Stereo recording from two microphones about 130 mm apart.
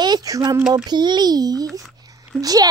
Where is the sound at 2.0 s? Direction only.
30° right (ahead or behind).